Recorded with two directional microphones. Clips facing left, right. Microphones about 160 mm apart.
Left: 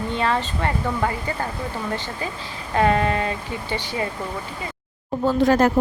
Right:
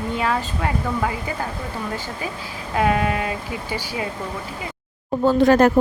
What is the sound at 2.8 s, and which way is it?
Speech, 5° right (ahead or behind).